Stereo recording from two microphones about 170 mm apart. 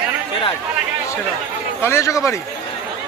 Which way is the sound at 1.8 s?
15° left (ahead or behind).